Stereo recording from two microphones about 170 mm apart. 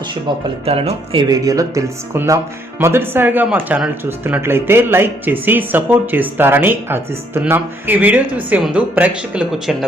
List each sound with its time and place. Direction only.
0.6 s speech: 35° right (ahead or behind)
1.3 s speech: 20° right (ahead or behind); by 9.7 s 5° right (ahead or behind)